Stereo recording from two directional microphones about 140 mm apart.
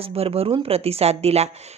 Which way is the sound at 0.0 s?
45° right (ahead or behind).